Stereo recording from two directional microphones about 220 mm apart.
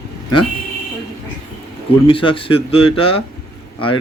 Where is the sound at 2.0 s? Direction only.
25° left (ahead or behind).